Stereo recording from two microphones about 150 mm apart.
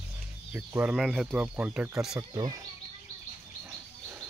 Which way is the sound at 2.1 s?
25° right (ahead or behind).